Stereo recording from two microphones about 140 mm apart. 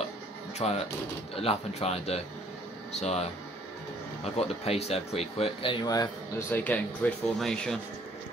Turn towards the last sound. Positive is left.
turn(degrees=5)  # may be behind; listen again after turning